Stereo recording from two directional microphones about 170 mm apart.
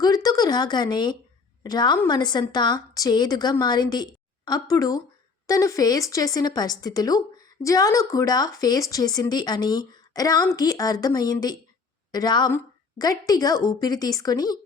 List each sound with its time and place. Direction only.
0.0 s speech: 20° left (ahead or behind)